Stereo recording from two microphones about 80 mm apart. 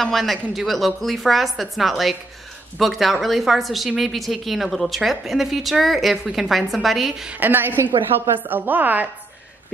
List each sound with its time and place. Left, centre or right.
0.0 s a woman's voice: centre
7.3 s speech: right